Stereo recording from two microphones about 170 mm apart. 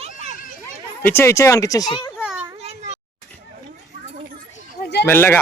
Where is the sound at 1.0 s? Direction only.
15° left (ahead or behind).